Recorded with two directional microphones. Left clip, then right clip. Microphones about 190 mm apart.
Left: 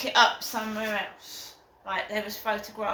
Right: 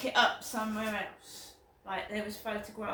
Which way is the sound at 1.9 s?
20° right (ahead or behind).